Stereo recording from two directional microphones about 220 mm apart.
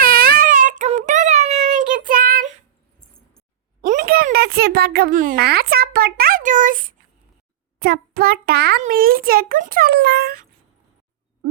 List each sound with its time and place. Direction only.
0.0 s child singing: 40° right (ahead or behind)
3.8 s a child's voice: 35° right (ahead or behind)
7.8 s child singing: 45° right (ahead or behind)
8.8 s a child's voice: 40° right (ahead or behind)